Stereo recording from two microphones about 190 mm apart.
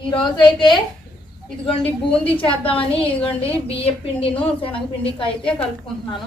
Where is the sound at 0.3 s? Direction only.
25° left (ahead or behind).